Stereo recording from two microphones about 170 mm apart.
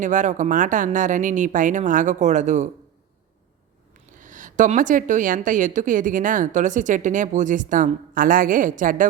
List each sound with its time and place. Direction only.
0.0 s a woman's voice: 45° right (ahead or behind)
4.1 s a woman's voice: 50° right (ahead or behind)